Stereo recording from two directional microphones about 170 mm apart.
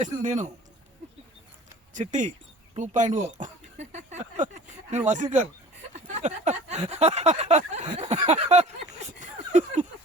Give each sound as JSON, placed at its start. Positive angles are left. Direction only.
{"t": 0.0, "sound": "a man's voice", "side_deg": -45}
{"t": 1.9, "sound": "speech", "side_deg": -45}
{"t": 2.7, "sound": "a sound", "side_deg": -45}